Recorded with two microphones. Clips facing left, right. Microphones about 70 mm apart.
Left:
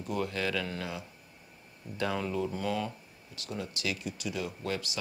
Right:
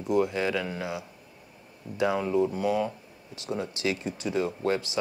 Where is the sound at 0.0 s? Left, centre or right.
Centre.